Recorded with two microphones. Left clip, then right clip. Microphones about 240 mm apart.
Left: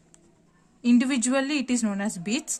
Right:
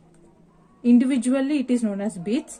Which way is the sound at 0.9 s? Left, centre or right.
Left.